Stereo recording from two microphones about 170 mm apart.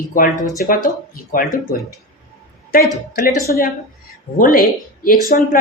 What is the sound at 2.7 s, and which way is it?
Speech, 60° left (ahead or behind).